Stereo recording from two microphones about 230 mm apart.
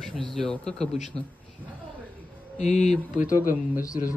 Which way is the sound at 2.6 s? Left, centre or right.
Left.